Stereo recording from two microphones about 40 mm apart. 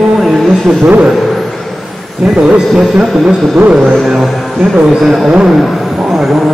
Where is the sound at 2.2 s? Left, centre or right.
Centre.